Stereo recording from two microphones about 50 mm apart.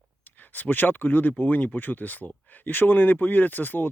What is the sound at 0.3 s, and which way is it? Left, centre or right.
Speech, left.